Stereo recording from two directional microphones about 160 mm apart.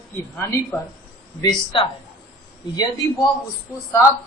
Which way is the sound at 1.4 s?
30° left (ahead or behind).